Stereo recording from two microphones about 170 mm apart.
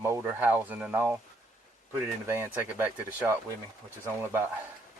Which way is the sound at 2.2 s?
15° right (ahead or behind).